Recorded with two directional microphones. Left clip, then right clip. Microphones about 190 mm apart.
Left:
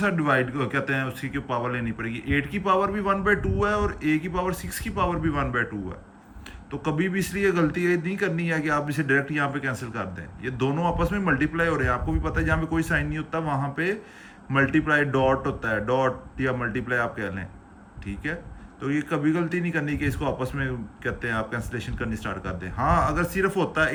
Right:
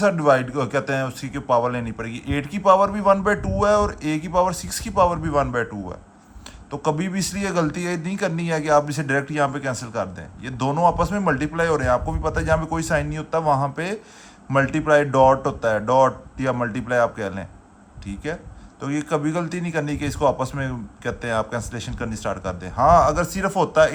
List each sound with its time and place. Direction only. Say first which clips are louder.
0.0 s a man's voice: right 6 dB; 20° right (ahead or behind)
6.7 s a man's voice: right 3 dB; 25° right (ahead or behind)